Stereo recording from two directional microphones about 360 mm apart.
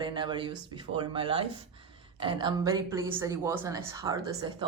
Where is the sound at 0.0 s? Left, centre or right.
Centre.